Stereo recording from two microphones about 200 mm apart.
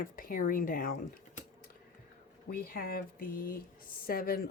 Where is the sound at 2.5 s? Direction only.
45° left (ahead or behind).